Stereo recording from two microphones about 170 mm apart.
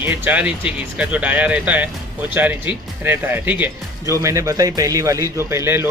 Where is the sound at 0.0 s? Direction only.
10° right (ahead or behind).